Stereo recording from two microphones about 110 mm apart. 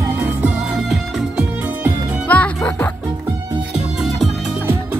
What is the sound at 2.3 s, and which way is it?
Music, 15° left (ahead or behind).